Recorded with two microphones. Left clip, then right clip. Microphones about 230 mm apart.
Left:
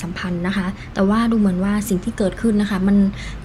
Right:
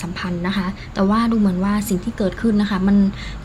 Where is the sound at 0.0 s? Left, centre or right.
Centre.